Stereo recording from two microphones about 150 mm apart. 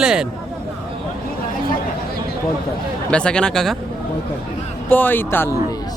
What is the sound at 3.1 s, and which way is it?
Speech, 5° left (ahead or behind).